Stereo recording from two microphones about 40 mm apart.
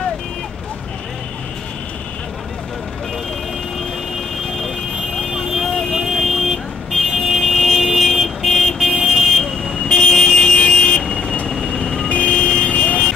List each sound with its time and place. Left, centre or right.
4.6 s vehicle: centre
9.8 s vehicle: centre
11.5 s vehicle: centre
12.1 s vehicle: left